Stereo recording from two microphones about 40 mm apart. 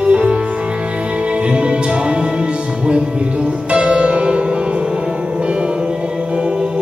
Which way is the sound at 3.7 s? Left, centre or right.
Right.